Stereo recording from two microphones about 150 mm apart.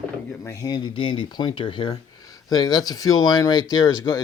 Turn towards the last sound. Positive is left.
turn(degrees=25)  # may be behind; listen again after turning